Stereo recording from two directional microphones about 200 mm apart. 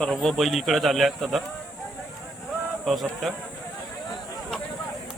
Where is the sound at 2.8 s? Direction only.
Centre (ahead or behind).